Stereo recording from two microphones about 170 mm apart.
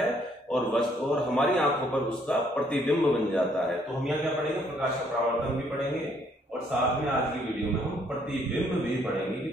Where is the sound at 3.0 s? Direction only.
Centre (ahead or behind).